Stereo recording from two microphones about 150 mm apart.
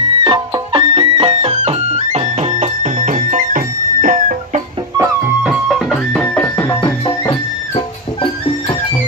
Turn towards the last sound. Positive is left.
turn(degrees=30)  # may be behind; listen again after turning